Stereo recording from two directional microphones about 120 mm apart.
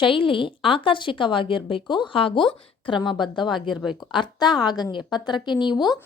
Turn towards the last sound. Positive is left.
turn(degrees=35)  # may be behind; listen again after turning